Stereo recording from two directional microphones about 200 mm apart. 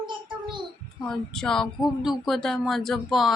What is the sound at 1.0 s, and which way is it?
Speech, 5° left (ahead or behind).